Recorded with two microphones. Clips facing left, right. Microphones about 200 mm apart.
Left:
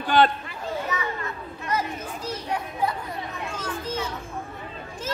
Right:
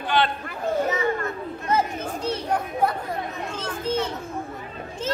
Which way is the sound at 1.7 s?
25° right (ahead or behind).